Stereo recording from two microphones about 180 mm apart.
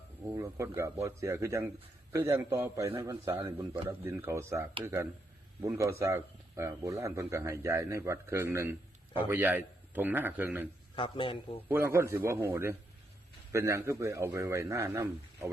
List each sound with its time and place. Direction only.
0.3 s speech: 15° right (ahead or behind)
10.9 s a man's voice: 30° left (ahead or behind)
11.7 s speech: 15° right (ahead or behind)